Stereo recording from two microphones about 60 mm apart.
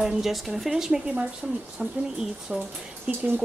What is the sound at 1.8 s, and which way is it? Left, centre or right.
Speech, right.